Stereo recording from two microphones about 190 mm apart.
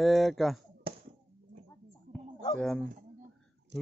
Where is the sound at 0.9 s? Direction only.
30° right (ahead or behind).